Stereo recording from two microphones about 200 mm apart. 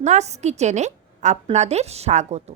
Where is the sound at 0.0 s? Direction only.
35° right (ahead or behind).